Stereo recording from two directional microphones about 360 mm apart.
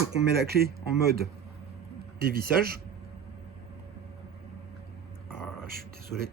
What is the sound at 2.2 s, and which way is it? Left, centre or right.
Speech, right.